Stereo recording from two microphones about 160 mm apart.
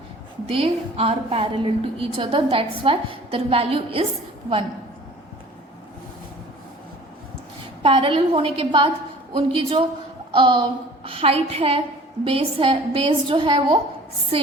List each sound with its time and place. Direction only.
0.4 s a woman's voice: 35° right (ahead or behind)
7.8 s a woman's voice: 35° right (ahead or behind)